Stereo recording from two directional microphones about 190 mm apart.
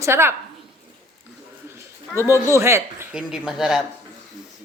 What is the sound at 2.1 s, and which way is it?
Speech, 15° right (ahead or behind).